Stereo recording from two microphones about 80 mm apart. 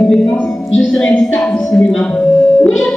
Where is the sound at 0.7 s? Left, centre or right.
Centre.